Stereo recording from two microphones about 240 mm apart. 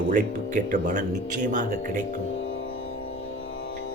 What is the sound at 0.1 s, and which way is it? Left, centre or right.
Speech, right.